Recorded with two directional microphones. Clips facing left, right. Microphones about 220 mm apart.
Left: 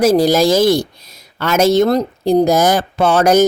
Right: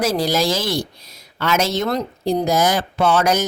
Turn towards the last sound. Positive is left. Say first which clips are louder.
# left 6 dB
turn(degrees=45)  # may be behind; listen again after turning